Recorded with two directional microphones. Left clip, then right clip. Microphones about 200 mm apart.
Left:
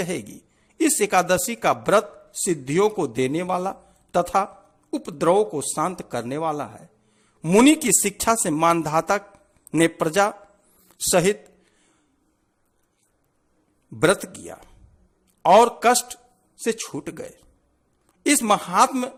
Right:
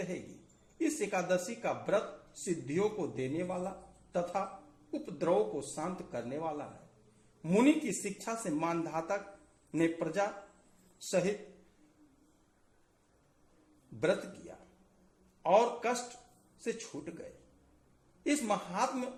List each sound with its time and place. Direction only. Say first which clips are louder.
0.8 s speech: left 14 dB; 50° left (ahead or behind)
15.4 s speech: left 14 dB; 50° left (ahead or behind)